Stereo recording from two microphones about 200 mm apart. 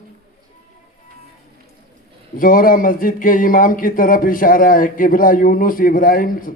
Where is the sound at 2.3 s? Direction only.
45° left (ahead or behind).